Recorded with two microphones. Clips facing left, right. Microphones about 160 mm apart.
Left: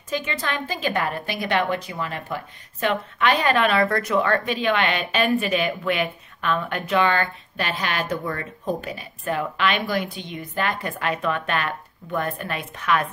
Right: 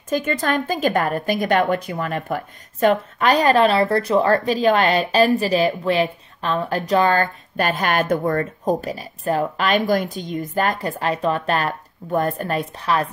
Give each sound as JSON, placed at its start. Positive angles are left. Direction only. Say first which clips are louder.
{"t": 0.1, "sound": "a woman's voice", "louder": "right 6 dB", "side_deg": -50}